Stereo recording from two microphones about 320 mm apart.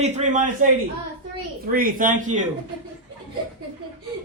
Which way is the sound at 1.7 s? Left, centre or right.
Right.